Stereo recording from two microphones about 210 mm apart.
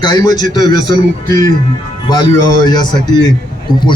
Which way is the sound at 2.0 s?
20° left (ahead or behind).